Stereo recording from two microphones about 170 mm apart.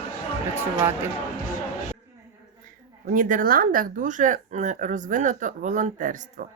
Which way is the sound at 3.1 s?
50° right (ahead or behind).